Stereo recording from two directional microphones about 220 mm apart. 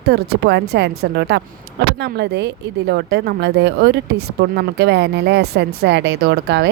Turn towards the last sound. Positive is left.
turn(degrees=-50)  # may be behind; listen again after turning